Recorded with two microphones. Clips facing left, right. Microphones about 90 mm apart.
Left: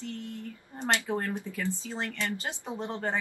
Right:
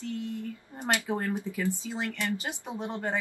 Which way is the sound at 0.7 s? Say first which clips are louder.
Even; 10° right (ahead or behind).